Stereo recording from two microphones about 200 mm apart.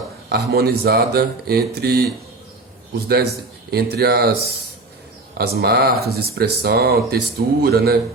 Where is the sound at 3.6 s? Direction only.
55° right (ahead or behind).